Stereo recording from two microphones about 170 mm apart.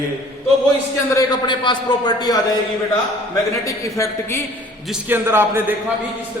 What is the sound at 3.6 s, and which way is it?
Speech, 15° left (ahead or behind).